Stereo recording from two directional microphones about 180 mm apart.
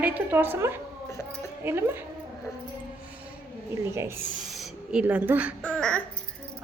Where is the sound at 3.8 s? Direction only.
15° right (ahead or behind).